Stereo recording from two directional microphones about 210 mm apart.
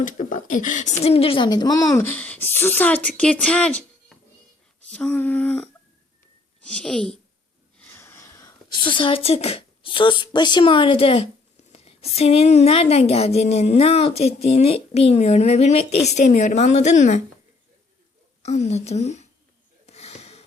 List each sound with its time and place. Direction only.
0.0 s speech: 40° left (ahead or behind)
18.4 s a woman's voice: 30° left (ahead or behind)
19.9 s wheeze: 30° left (ahead or behind)